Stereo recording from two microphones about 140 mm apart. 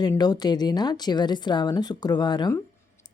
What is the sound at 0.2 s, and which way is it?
A woman's voice, 30° left (ahead or behind).